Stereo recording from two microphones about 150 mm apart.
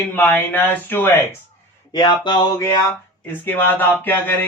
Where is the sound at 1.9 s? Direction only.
30° left (ahead or behind).